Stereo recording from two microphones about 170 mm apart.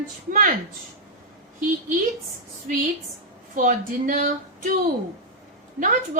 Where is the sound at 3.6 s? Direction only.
50° right (ahead or behind).